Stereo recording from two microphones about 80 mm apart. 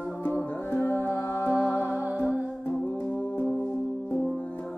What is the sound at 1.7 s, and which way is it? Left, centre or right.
Music, left.